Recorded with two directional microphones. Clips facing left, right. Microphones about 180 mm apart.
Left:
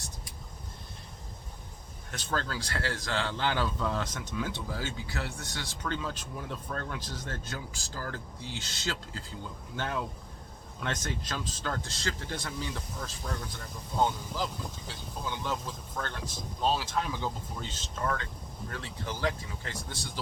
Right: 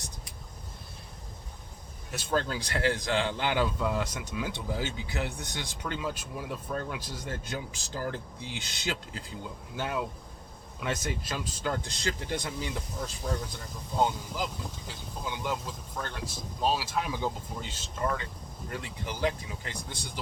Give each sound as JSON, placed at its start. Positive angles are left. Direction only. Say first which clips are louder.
{"t": 2.0, "sound": "speech", "louder": "right 4 dB", "side_deg": -15}